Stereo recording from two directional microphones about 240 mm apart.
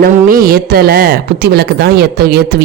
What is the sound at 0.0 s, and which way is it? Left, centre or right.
Speech, right.